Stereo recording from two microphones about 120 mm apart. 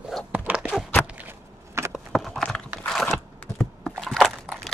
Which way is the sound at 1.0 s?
15° right (ahead or behind).